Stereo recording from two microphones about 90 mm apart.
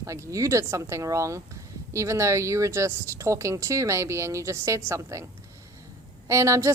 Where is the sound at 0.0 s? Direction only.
35° right (ahead or behind).